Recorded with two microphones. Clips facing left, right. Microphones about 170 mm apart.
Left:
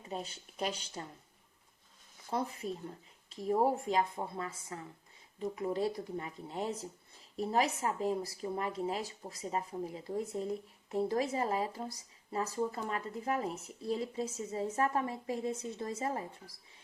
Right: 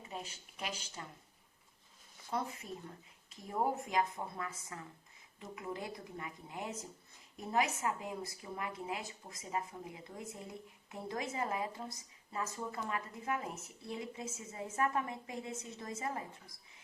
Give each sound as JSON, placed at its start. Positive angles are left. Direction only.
{"t": 0.1, "sound": "speech", "side_deg": 35}
{"t": 2.3, "sound": "speech", "side_deg": 35}